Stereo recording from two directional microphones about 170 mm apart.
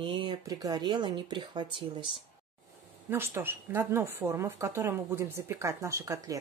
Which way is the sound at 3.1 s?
15° right (ahead or behind).